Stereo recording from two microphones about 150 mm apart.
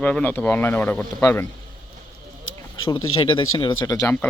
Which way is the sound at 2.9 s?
35° left (ahead or behind).